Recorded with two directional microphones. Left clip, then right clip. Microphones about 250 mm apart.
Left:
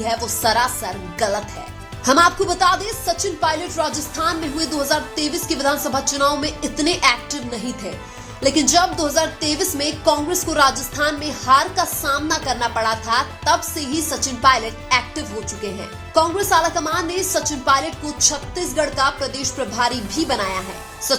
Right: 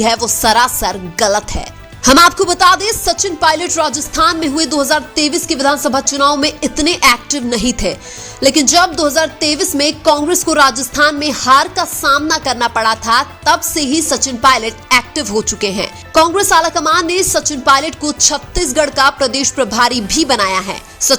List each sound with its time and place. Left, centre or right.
0.0 s a woman's voice: right